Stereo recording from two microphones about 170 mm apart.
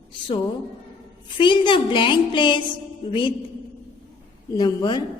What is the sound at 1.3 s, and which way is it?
A woman's voice, 30° left (ahead or behind).